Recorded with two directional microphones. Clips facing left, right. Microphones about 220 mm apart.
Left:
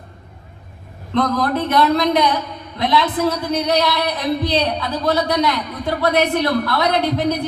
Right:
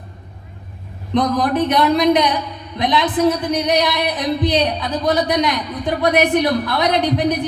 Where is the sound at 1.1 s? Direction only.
15° right (ahead or behind).